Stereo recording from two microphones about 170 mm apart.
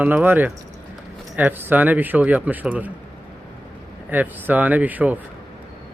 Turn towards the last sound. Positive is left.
turn(degrees=-10)  # may be behind; listen again after turning